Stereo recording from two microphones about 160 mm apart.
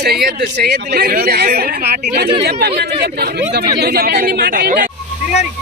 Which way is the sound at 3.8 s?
70° right (ahead or behind).